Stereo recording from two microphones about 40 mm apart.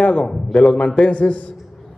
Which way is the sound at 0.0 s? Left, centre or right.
Left.